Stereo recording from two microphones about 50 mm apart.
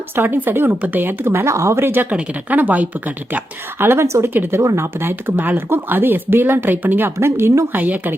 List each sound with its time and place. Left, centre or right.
0.1 s speech: right
1.2 s speech: right
1.8 s speech: right
2.0 s speech: right
3.8 s speech: right
4.9 s speech: right
7.2 s speech: right
7.7 s speech: right